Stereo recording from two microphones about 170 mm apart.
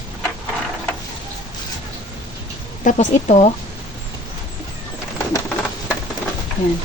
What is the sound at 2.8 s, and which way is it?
Speech, 45° left (ahead or behind).